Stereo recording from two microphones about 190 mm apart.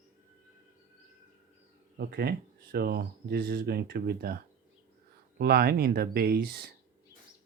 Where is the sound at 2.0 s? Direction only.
55° right (ahead or behind).